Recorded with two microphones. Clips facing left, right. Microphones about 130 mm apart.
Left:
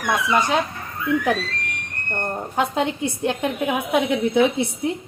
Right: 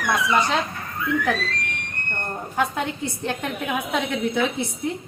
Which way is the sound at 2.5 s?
25° left (ahead or behind).